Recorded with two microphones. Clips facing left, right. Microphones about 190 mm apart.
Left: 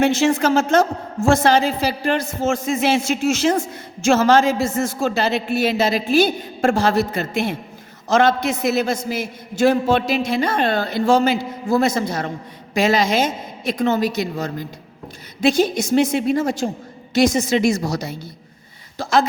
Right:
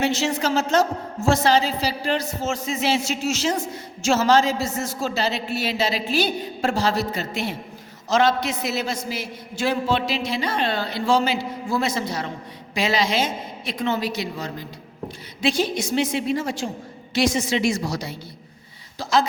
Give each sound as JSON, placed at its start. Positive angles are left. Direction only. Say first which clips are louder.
{"t": 0.0, "sound": "a woman's voice", "louder": "left 6 dB", "side_deg": 50}